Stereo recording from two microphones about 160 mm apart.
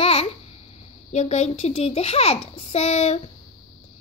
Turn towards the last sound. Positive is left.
turn(degrees=45)  # may be behind; listen again after turning